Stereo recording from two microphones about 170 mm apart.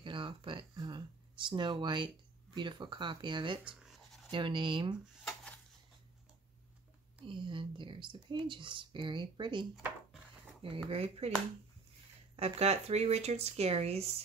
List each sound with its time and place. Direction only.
0.0 s a sound: 30° right (ahead or behind)
1.5 s speech: 25° right (ahead or behind)
5.2 s dishes: 5° left (ahead or behind)
7.2 s speech: 30° right (ahead or behind)
12.4 s speech: 40° right (ahead or behind)